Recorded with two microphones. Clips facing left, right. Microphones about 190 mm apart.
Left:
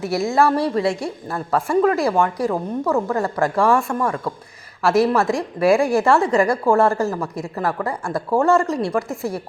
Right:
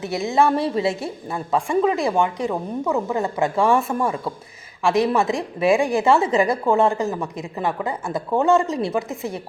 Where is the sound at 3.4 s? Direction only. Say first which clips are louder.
Left 1 dB; centre (ahead or behind).